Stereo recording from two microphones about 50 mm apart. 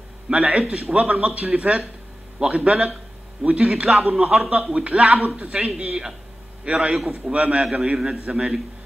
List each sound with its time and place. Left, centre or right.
0.3 s a man's voice: right